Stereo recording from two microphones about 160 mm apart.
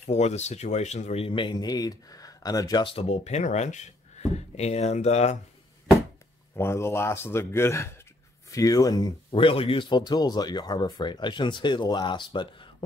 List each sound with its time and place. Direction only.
0.0 s speech: 45° left (ahead or behind)
6.5 s speech: 15° left (ahead or behind)
9.3 s speech: 35° left (ahead or behind)